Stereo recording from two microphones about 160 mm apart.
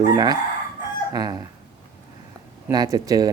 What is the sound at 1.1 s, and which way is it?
Speech, 25° right (ahead or behind).